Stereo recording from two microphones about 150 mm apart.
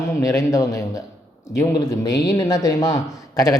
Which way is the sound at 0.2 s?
20° left (ahead or behind).